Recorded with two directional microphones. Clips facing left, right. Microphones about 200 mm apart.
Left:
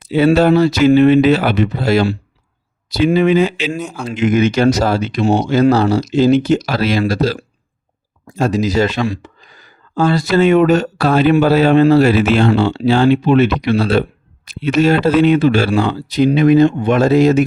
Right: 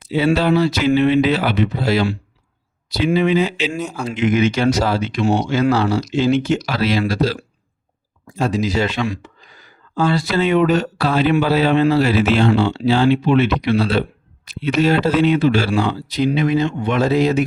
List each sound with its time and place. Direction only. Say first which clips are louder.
0.3 s speech: left 5 dB; 45° left (ahead or behind)
3.8 s speech: even; centre (ahead or behind)
4.1 s speech: left 3 dB; 45° left (ahead or behind)
5.2 s speech: left 3 dB; 25° left (ahead or behind)
5.5 s speech: left 5 dB; 40° left (ahead or behind)
8.4 s speech: left 4 dB; 45° left (ahead or behind)